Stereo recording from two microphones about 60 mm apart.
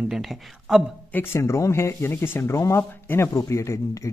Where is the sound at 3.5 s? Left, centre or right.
Left.